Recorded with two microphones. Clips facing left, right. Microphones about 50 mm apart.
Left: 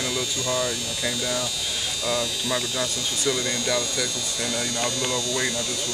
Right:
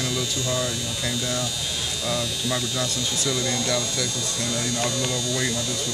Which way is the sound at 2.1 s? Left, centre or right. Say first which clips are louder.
Left 1 dB; centre.